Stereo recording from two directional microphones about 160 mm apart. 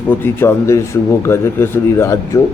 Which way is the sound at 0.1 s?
15° left (ahead or behind).